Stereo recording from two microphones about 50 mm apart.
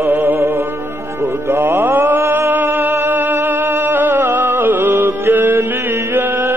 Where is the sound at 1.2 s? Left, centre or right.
Right.